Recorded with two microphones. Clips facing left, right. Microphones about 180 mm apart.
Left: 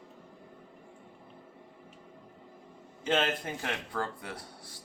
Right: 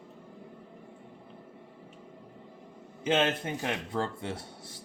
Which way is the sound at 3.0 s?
20° right (ahead or behind).